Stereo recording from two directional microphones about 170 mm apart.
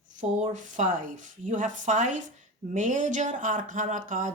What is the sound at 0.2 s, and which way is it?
Speech, 45° right (ahead or behind).